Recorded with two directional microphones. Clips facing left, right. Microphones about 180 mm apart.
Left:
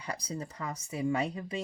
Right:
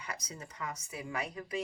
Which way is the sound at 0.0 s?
30° left (ahead or behind).